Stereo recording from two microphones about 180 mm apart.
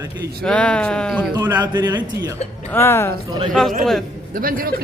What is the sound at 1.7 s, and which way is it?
Speech, 25° right (ahead or behind).